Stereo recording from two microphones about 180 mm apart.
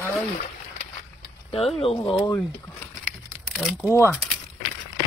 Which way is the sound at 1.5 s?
35° left (ahead or behind).